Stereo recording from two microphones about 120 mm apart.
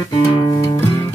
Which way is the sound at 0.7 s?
20° left (ahead or behind).